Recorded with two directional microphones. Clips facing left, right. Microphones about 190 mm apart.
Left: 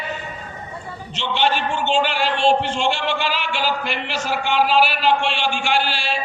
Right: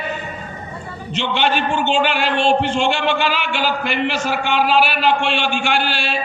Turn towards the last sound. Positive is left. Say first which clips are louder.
# right 1 dB
turn(degrees=-60)  # may be behind; listen again after turning